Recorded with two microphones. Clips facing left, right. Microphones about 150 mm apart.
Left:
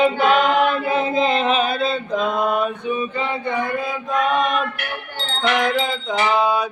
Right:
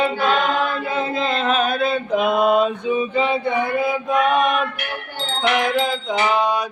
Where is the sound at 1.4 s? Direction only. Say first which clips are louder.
Even; centre (ahead or behind).